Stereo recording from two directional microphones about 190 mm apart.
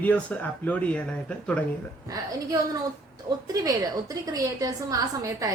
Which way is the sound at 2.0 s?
20° right (ahead or behind).